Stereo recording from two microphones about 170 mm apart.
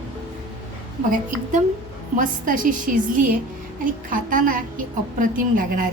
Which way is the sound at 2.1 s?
50° right (ahead or behind).